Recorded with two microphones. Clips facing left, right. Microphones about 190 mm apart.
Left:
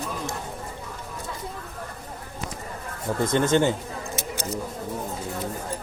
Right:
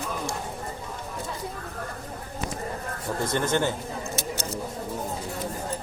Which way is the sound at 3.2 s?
20° left (ahead or behind).